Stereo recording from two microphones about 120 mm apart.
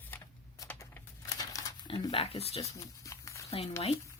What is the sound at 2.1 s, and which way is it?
Speech, 55° left (ahead or behind).